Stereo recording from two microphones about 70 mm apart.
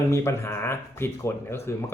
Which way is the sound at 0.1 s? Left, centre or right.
Left.